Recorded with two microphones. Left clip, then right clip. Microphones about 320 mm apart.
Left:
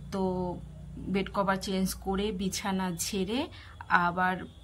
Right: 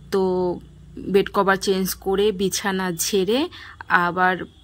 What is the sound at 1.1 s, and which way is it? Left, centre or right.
Speech, centre.